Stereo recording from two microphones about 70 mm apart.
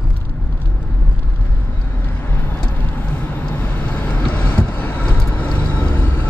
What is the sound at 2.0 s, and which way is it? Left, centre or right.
Vehicle, left.